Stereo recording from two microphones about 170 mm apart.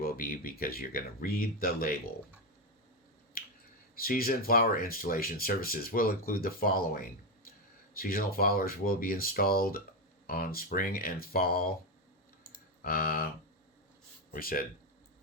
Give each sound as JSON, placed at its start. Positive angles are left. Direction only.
{"t": 0.0, "sound": "speech", "side_deg": 55}
{"t": 3.4, "sound": "finger snapping", "side_deg": 60}
{"t": 3.9, "sound": "speech", "side_deg": 60}
{"t": 12.8, "sound": "speech", "side_deg": 60}